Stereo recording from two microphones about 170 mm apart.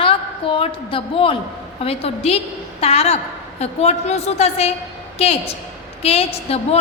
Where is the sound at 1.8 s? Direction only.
35° left (ahead or behind).